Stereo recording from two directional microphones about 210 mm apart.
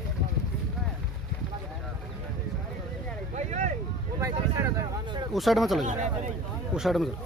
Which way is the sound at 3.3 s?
35° right (ahead or behind).